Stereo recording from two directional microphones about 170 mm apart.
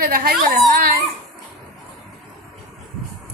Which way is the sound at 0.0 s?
60° right (ahead or behind).